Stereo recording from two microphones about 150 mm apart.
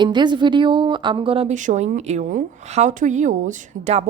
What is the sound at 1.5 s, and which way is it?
A woman's voice, 55° right (ahead or behind).